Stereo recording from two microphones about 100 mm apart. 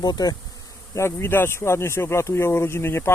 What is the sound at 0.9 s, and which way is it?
Speech, 25° left (ahead or behind).